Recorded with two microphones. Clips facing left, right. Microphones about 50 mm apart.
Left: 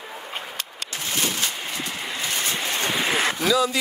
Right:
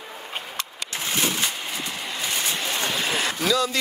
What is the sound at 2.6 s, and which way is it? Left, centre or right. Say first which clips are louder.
Vehicle: left 3 dB; left.